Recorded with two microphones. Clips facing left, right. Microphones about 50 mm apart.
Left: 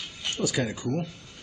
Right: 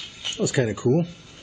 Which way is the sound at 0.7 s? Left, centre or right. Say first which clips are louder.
Right 9 dB; right.